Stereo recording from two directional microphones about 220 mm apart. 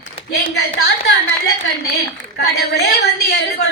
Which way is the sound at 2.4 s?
50° left (ahead or behind).